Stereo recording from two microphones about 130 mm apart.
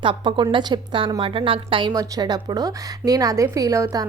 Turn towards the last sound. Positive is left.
turn(degrees=-25)  # may be behind; listen again after turning